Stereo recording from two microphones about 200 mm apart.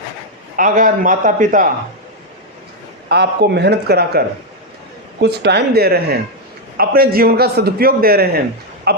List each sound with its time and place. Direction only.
0.5 s a man's voice: 40° right (ahead or behind)
3.1 s speech: 55° right (ahead or behind)
5.2 s a man's voice: 55° right (ahead or behind)